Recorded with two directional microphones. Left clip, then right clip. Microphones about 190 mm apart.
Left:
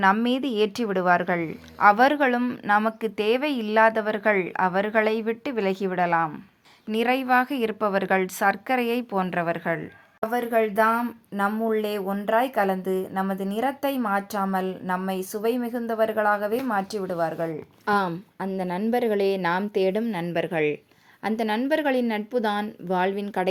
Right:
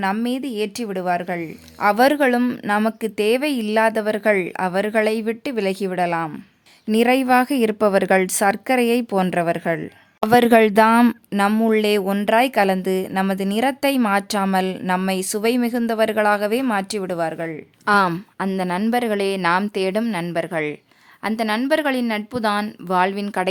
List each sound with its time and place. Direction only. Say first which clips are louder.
0.0 s a woman's voice: left 2 dB; 15° right (ahead or behind)
1.8 s a woman's voice: right 2 dB; 30° right (ahead or behind)
10.3 s speech: right 9 dB; 55° right (ahead or behind)
11.3 s speech: right 6 dB; 35° right (ahead or behind); by 23.5 s 20° right (ahead or behind)